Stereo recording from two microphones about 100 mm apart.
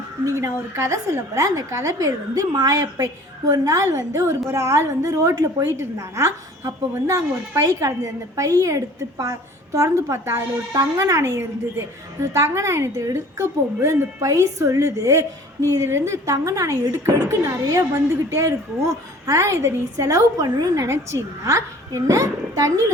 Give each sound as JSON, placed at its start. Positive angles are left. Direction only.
{"t": 0.3, "sound": "a woman's voice", "side_deg": -30}